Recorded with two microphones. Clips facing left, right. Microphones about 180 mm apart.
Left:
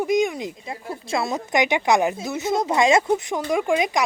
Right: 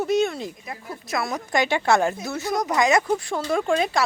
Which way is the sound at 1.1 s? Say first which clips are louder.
Left 2 dB; 25° left (ahead or behind).